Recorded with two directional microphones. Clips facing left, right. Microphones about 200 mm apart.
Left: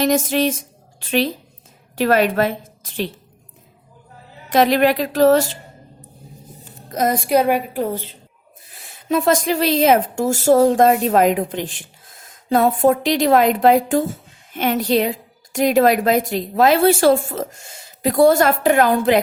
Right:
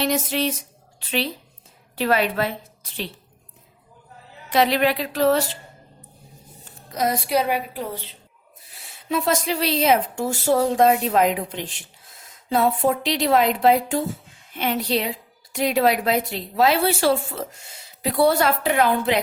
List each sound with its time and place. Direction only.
0.0 s a woman's voice: 45° left (ahead or behind)
4.4 s speech: 45° left (ahead or behind)
6.8 s speech: 50° left (ahead or behind)